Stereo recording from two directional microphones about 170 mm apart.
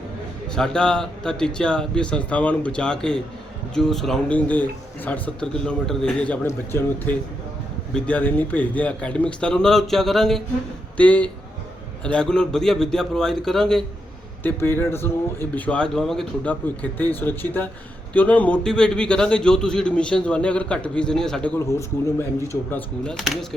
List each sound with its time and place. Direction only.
0.5 s a man's voice: 5° left (ahead or behind)
14.4 s a man's voice: 15° left (ahead or behind)
21.7 s speech: 15° left (ahead or behind)
22.7 s a man's voice: 5° left (ahead or behind)